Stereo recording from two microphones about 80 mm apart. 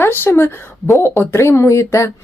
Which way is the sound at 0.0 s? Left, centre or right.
Left.